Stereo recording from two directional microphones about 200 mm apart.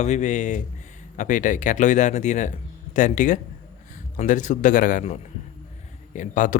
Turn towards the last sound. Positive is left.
turn(degrees=40)  # may be behind; listen again after turning